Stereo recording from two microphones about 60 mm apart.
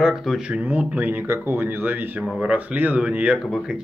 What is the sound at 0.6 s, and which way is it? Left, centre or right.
A man's voice, right.